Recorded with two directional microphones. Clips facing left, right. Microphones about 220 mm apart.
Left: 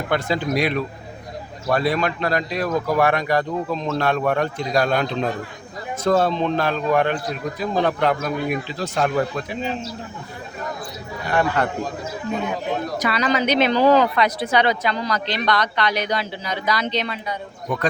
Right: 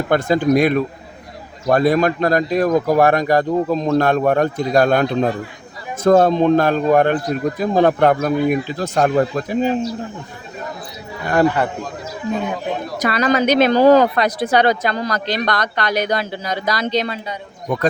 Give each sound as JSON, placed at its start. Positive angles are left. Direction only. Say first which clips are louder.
{"t": 0.1, "sound": "speech", "louder": "right 7 dB", "side_deg": -45}
{"t": 13.0, "sound": "speech", "louder": "right 6 dB", "side_deg": -50}